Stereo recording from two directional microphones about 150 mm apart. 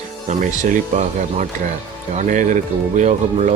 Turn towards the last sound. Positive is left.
turn(degrees=-50)  # may be behind; listen again after turning